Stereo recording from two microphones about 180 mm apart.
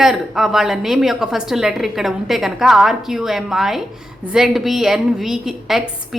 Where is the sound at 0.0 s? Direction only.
Centre (ahead or behind).